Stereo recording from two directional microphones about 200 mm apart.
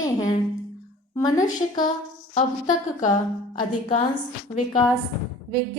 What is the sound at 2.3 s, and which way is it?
Speech, 40° left (ahead or behind).